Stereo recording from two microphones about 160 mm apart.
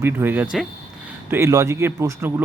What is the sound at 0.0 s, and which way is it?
Speech, 10° right (ahead or behind).